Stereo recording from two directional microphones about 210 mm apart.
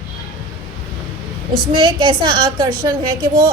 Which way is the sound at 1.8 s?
25° right (ahead or behind).